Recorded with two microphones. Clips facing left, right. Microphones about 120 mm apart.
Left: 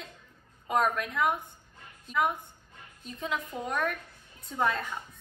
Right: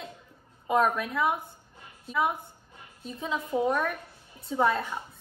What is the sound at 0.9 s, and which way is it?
A woman's voice, 5° right (ahead or behind).